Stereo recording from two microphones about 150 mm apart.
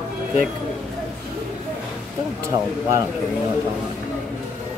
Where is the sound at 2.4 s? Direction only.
20° right (ahead or behind).